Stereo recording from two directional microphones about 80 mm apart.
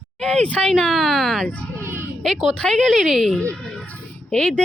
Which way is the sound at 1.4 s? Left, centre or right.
Centre.